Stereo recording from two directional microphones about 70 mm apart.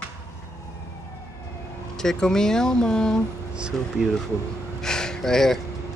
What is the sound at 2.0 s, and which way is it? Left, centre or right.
Speech, centre.